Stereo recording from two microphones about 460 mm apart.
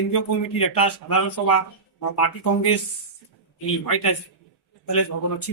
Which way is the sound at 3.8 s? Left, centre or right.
Left.